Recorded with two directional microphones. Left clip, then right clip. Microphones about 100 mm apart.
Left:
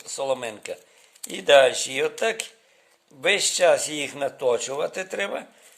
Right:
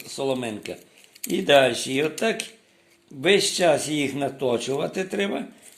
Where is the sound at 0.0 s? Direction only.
55° left (ahead or behind).